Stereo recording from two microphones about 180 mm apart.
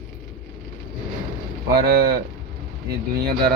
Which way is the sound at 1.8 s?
60° right (ahead or behind).